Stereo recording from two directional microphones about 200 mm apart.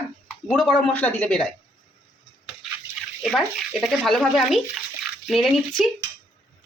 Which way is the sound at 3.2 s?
Centre (ahead or behind).